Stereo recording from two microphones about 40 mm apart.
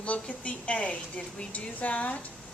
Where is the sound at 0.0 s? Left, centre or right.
Left.